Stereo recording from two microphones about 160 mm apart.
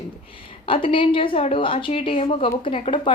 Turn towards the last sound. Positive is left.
turn(degrees=30)  # may be behind; listen again after turning